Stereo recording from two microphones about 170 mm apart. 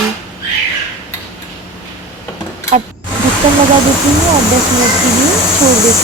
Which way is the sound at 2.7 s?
40° right (ahead or behind).